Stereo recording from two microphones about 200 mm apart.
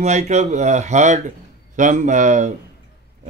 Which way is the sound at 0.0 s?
35° right (ahead or behind).